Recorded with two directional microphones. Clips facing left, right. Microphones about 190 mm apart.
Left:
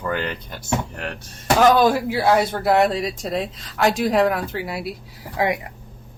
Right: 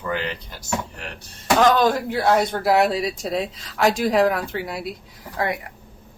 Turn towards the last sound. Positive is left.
turn(degrees=15)  # may be behind; listen again after turning